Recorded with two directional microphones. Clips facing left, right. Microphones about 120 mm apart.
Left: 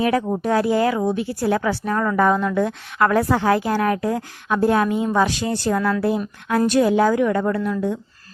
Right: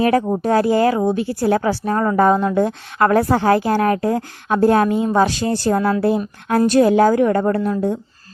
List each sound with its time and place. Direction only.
0.0 s a woman's voice: 45° right (ahead or behind)